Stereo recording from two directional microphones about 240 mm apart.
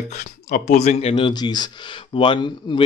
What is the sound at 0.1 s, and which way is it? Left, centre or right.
Speech, left.